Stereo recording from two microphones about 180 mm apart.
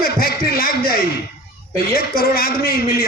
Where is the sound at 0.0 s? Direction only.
60° left (ahead or behind).